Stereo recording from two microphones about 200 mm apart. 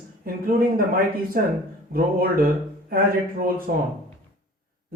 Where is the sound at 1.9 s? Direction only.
45° right (ahead or behind).